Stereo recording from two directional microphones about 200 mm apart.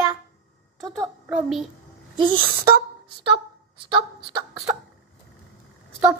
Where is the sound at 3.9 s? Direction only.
25° right (ahead or behind).